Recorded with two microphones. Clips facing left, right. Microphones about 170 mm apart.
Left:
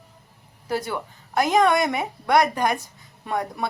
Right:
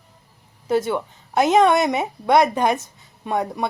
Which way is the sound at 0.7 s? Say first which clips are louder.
Right 6 dB; 25° right (ahead or behind).